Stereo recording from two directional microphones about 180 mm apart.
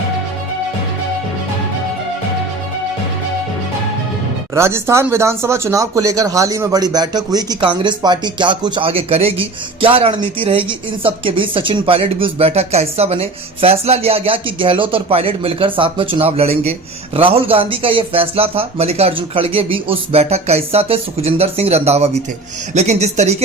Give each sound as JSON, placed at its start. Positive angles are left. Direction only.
{"t": 4.5, "sound": "speech", "side_deg": -15}